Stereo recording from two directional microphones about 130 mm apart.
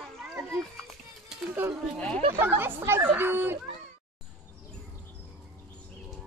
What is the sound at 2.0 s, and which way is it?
Speech, 5° left (ahead or behind).